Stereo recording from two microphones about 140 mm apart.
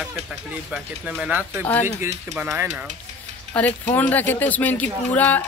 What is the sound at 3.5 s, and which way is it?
Speech, 10° left (ahead or behind).